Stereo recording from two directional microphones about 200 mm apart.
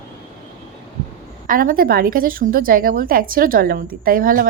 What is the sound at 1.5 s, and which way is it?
A woman's voice, 45° right (ahead or behind).